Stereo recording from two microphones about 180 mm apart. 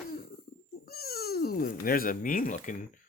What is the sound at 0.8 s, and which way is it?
Speech, 60° left (ahead or behind).